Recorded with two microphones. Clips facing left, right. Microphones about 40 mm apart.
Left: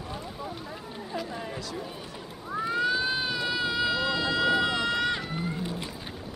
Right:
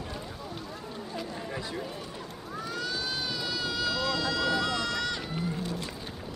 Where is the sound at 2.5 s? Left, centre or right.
Left.